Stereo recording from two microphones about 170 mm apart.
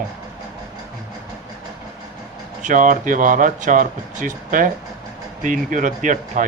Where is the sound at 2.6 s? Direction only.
50° right (ahead or behind).